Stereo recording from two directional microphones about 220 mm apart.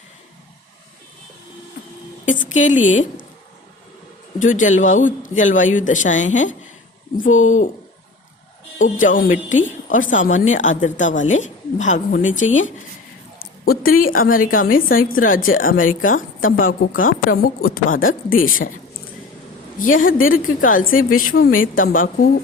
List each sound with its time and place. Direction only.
2.6 s a woman's voice: 35° left (ahead or behind)
4.4 s a woman's voice: 35° left (ahead or behind)
8.8 s a woman's voice: 35° left (ahead or behind)
13.4 s a sound: 45° left (ahead or behind)
14.0 s a woman's voice: 40° left (ahead or behind)
20.3 s a woman's voice: 40° left (ahead or behind)